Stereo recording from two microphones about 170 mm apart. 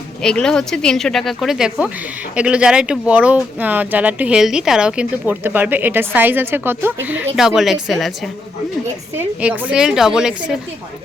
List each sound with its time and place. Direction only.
0.2 s speech: 5° left (ahead or behind)